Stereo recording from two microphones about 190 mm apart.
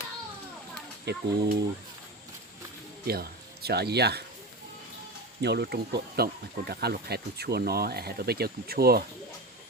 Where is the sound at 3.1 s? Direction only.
55° right (ahead or behind).